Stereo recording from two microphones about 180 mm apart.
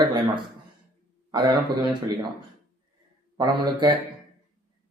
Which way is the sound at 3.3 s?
25° right (ahead or behind).